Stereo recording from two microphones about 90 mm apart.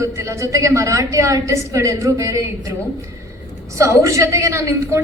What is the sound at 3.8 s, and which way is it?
A woman's voice, 35° right (ahead or behind).